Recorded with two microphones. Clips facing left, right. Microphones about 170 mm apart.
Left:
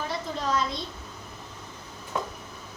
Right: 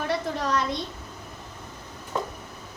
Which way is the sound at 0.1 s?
70° right (ahead or behind).